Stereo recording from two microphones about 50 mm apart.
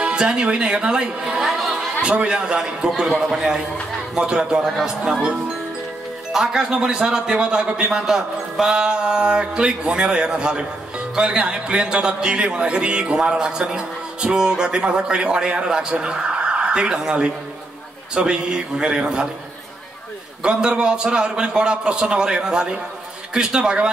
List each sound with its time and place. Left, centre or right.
0.0 s speech: centre
2.0 s speech: centre
6.3 s speech: centre
20.4 s speech: centre